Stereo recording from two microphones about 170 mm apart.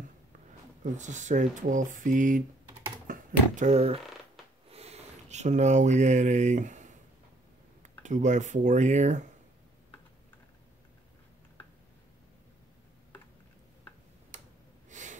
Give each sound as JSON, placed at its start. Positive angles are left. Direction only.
{"t": 0.9, "sound": "speech", "side_deg": -45}
{"t": 8.0, "sound": "speech", "side_deg": -45}
{"t": 14.9, "sound": "gasp", "side_deg": -45}